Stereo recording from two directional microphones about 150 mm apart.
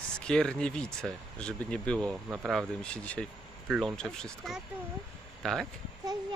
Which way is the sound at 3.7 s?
5° right (ahead or behind).